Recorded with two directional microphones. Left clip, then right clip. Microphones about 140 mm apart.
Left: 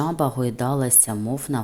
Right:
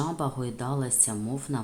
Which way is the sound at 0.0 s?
40° left (ahead or behind).